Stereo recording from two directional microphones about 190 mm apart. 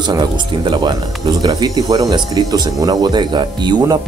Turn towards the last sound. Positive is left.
turn(degrees=-20)  # may be behind; listen again after turning